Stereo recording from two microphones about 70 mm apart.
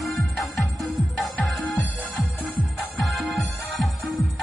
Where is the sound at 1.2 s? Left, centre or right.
Centre.